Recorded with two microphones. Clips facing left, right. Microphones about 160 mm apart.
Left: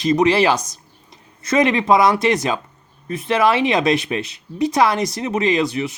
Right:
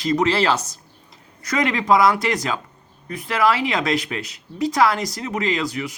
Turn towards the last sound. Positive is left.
turn(degrees=25)  # may be behind; listen again after turning